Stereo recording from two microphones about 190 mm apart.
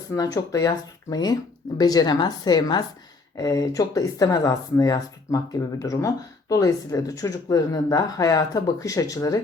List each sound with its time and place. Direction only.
0.1 s speech: 15° left (ahead or behind)